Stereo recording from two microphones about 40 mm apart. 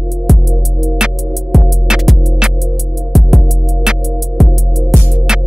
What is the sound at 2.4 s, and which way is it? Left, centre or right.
Music, centre.